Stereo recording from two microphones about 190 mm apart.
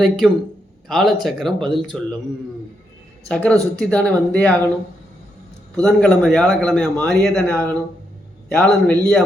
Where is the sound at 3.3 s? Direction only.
5° left (ahead or behind).